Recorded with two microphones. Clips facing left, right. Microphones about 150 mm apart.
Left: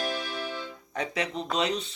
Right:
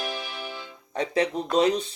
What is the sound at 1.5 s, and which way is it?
Speech, 35° right (ahead or behind).